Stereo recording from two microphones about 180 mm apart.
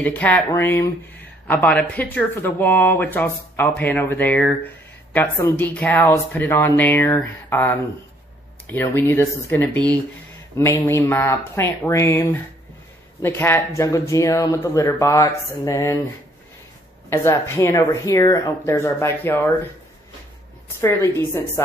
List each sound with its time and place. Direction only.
0.0 s speech: 10° left (ahead or behind)
17.1 s speech: 15° left (ahead or behind)
20.8 s speech: 15° left (ahead or behind)